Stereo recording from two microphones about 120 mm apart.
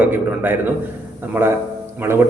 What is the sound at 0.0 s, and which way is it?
A man's voice, 15° right (ahead or behind).